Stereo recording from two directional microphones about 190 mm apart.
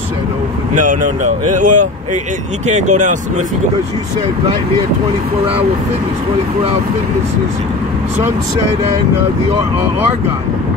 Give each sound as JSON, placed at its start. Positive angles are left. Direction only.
{"t": 0.7, "sound": "speech", "side_deg": -40}